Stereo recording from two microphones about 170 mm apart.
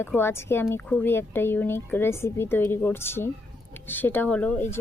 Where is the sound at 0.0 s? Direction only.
15° left (ahead or behind).